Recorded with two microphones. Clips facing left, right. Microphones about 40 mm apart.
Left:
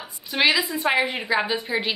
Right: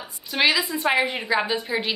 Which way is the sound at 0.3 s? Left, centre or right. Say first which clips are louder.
Even; centre.